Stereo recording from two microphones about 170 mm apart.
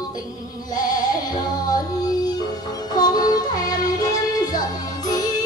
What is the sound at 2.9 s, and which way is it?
Music, 25° left (ahead or behind).